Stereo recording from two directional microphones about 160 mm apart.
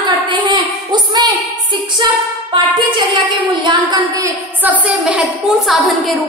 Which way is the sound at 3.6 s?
20° right (ahead or behind).